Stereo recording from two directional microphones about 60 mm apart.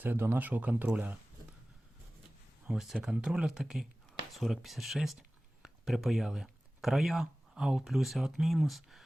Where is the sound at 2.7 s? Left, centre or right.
Centre.